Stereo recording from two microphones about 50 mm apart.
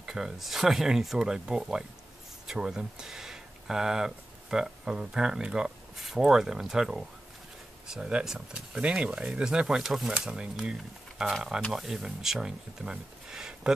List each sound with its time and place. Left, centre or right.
0.0 s speech: centre